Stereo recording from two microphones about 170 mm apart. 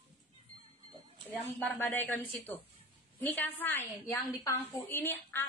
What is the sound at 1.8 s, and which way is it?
A woman's voice, 10° left (ahead or behind).